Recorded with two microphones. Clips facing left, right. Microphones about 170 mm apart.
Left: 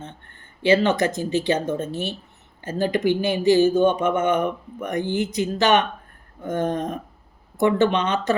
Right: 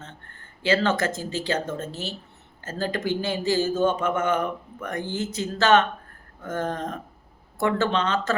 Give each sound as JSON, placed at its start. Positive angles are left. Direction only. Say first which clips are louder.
{"t": 0.0, "sound": "speech", "louder": "left 5 dB", "side_deg": 20}
{"t": 1.9, "sound": "speech", "louder": "left 6 dB", "side_deg": 60}
{"t": 2.6, "sound": "speech", "louder": "left 6 dB", "side_deg": 20}
{"t": 6.4, "sound": "a sound", "louder": "left 5 dB", "side_deg": 20}
{"t": 7.6, "sound": "speech", "louder": "left 4 dB", "side_deg": 20}